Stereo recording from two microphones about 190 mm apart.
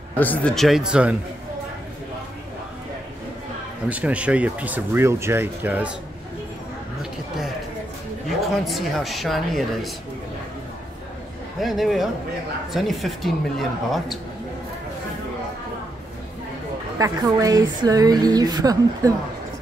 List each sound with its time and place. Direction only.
0.2 s speech: 10° left (ahead or behind)
3.9 s speech: 5° right (ahead or behind)
7.0 s a sound: centre (ahead or behind)
8.6 s speech: centre (ahead or behind)
11.6 s speech: centre (ahead or behind)
17.0 s a woman's voice: 20° right (ahead or behind)